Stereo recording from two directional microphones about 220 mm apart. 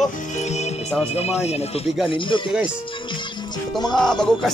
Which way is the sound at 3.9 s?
5° left (ahead or behind).